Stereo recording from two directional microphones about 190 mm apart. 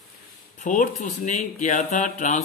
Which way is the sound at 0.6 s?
40° left (ahead or behind).